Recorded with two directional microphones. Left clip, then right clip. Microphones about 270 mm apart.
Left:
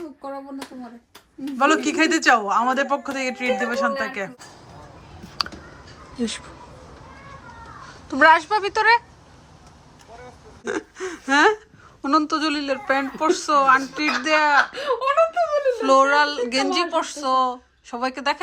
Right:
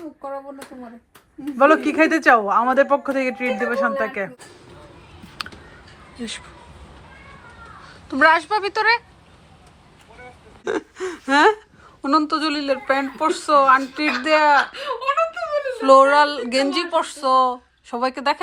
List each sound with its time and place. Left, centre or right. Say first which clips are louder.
1.5 s speech: right 4 dB; centre
8.2 s speech: left 1 dB; centre
10.7 s speech: right 3 dB; centre
14.8 s a sound: left 2 dB; left
15.8 s speech: right 5 dB; centre